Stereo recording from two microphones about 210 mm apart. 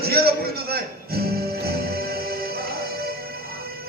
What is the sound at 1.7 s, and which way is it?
Music, 50° right (ahead or behind).